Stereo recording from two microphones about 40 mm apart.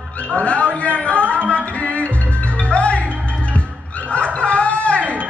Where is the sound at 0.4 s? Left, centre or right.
Left.